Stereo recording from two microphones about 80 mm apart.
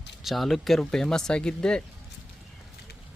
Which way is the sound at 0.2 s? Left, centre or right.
Centre.